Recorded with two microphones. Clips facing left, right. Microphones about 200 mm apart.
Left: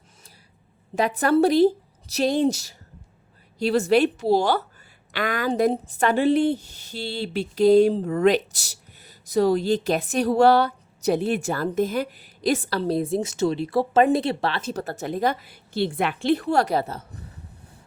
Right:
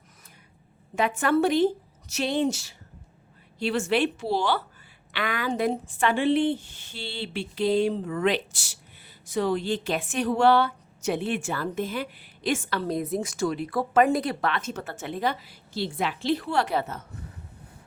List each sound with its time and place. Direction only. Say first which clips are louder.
0.9 s a woman's voice: left 4 dB; 35° left (ahead or behind)